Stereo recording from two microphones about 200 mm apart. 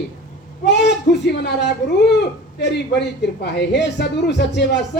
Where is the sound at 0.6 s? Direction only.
60° left (ahead or behind).